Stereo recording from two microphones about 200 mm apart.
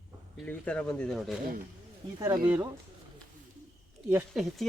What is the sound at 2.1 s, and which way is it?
Speech, 20° right (ahead or behind).